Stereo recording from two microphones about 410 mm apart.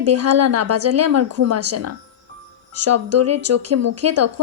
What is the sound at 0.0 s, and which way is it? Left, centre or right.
Speech, right.